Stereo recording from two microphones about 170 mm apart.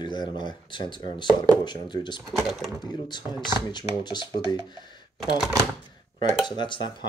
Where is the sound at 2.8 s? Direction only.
25° left (ahead or behind).